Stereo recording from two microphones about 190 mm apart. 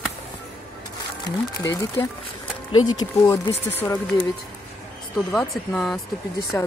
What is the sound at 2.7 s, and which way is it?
Speech, 90° left.